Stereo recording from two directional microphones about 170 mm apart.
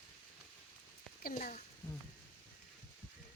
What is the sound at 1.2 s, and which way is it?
Speech, 55° left (ahead or behind).